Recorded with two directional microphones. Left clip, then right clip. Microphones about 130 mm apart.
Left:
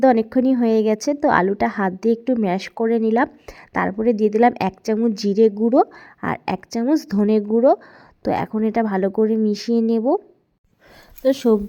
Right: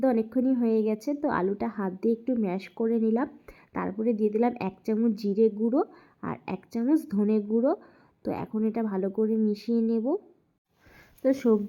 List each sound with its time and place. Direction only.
0.0 s speech: 30° left (ahead or behind)